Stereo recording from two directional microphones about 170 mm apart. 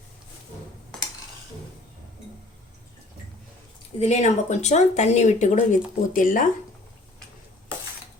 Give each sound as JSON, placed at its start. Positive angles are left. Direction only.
{"t": 4.0, "sound": "speech", "side_deg": 40}